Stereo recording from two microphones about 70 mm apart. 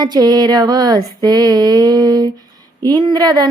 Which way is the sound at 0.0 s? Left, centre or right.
Right.